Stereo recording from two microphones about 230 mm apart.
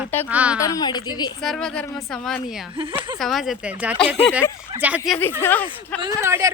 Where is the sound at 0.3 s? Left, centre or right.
Centre.